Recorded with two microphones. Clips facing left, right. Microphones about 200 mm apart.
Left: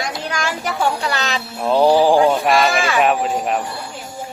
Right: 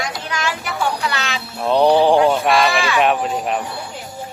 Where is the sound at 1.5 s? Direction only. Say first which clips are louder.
Even; centre (ahead or behind).